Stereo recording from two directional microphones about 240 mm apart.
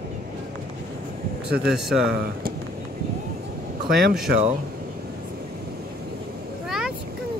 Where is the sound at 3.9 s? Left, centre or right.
Right.